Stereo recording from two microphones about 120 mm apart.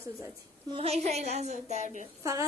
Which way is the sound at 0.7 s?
60° right (ahead or behind).